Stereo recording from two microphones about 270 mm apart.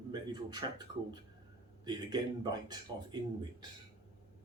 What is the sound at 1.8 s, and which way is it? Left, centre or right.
Speech, centre.